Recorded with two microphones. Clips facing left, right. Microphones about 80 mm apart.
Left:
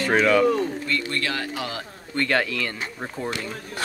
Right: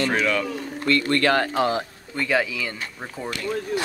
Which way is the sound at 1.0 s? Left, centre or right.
Right.